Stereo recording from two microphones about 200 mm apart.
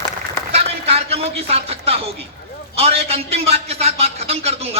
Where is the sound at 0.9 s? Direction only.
30° right (ahead or behind).